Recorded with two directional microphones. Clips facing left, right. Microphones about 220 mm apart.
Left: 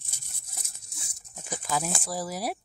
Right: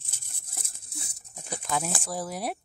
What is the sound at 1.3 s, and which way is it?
Speech, 5° left (ahead or behind).